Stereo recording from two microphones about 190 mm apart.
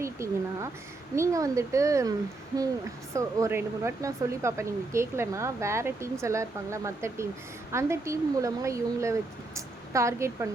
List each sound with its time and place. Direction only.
0.0 s speech: 15° right (ahead or behind)
3.2 s a woman's voice: 15° right (ahead or behind)